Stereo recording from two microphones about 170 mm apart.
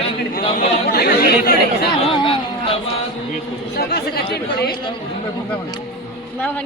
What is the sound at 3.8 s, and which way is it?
Speech, 70° left (ahead or behind).